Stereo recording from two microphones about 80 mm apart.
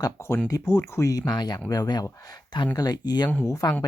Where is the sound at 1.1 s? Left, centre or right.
Left.